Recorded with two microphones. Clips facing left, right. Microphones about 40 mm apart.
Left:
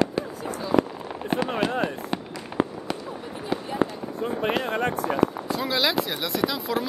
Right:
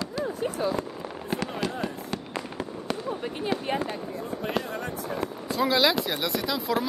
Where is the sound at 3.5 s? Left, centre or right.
Centre.